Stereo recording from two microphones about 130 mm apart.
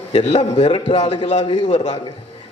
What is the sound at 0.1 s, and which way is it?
A man's voice, 55° left (ahead or behind).